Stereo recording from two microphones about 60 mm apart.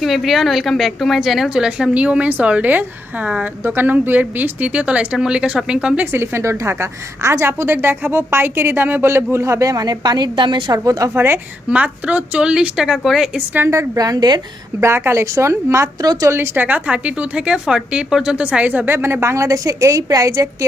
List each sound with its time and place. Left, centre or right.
0.0 s a woman's voice: centre
1.5 s a woman's voice: centre
3.6 s a woman's voice: right; by 6.1 s centre
6.1 s a woman's voice: right
7.4 s a woman's voice: right
11.1 s speech: right
11.7 s a woman's voice: right; by 13.3 s centre
13.7 s a woman's voice: right
14.8 s a woman's voice: right
16.0 s a woman's voice: right
16.6 s a woman's voice: right
18.9 s a woman's voice: right